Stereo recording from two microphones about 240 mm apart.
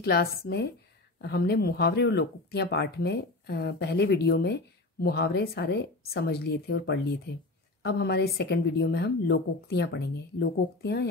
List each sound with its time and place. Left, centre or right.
0.0 s speech: left